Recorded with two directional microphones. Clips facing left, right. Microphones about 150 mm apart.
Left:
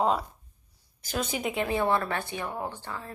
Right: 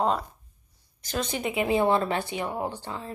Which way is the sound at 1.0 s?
5° left (ahead or behind).